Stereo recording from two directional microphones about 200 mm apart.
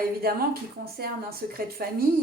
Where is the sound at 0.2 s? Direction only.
50° right (ahead or behind).